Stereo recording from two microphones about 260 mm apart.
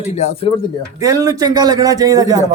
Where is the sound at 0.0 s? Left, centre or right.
Left.